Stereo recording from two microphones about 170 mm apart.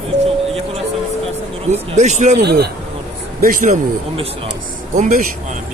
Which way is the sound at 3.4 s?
55° right (ahead or behind).